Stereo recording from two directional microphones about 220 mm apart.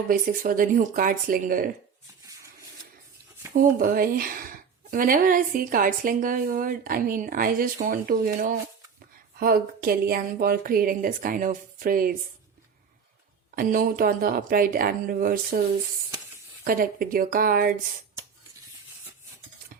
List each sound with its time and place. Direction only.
0.1 s speech: 40° right (ahead or behind)
3.5 s speech: 40° right (ahead or behind)
13.6 s speech: 40° right (ahead or behind)
16.6 s speech: 40° right (ahead or behind)